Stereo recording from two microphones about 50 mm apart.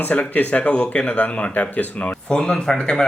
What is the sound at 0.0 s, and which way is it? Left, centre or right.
Speech, left.